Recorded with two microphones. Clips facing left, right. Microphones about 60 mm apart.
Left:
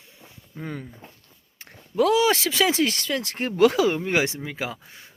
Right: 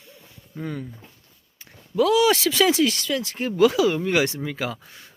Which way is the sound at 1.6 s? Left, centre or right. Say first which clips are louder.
Even; left.